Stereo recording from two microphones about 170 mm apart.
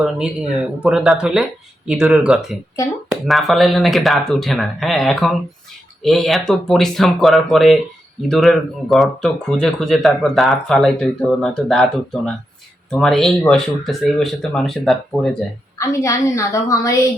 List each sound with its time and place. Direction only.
0.0 s speech: 5° right (ahead or behind)
15.8 s a woman's voice: 20° left (ahead or behind)